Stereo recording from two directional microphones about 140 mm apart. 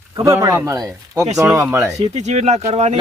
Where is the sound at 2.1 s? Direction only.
55° right (ahead or behind).